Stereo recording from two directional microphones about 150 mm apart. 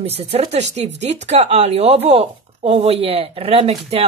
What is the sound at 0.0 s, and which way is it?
Speech, 45° right (ahead or behind).